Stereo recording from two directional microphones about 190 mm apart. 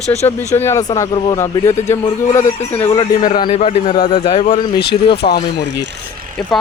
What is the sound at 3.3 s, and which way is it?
A man's voice, 25° left (ahead or behind).